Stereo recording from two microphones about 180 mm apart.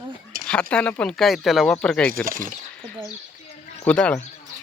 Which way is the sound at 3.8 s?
5° left (ahead or behind).